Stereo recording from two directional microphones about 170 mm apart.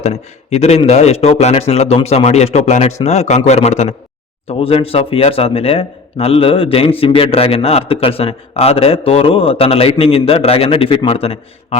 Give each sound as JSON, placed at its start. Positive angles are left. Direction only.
{"t": 0.0, "sound": "speech", "side_deg": 40}